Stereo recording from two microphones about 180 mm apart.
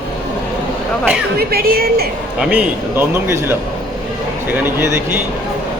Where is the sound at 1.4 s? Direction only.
60° right (ahead or behind).